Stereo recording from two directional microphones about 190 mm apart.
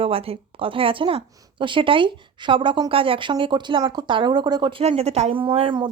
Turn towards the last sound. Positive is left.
turn(degrees=-30)  # may be behind; listen again after turning